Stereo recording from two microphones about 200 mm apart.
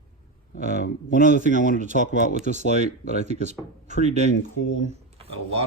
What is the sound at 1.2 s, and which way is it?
Speech, 40° right (ahead or behind).